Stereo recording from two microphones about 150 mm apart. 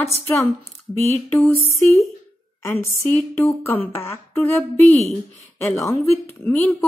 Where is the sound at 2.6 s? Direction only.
15° left (ahead or behind).